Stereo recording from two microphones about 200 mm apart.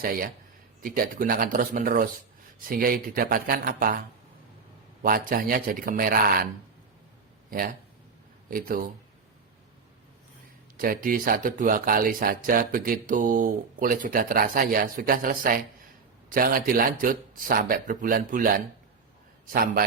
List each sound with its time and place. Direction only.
0.0 s speech: 45° right (ahead or behind)
5.0 s speech: 45° right (ahead or behind)
8.4 s speech: 45° right (ahead or behind)
10.8 s speech: 45° right (ahead or behind)